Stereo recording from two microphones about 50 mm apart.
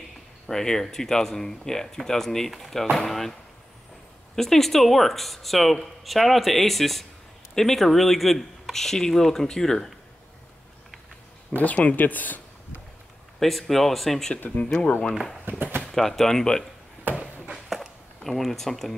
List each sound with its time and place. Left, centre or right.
0.5 s speech: centre
4.4 s speech: centre
11.5 s speech: left
13.4 s speech: centre
14.6 s speech: centre
15.5 s speech: right
15.8 s speech: centre
17.1 s a sound: right
17.6 s a sound: centre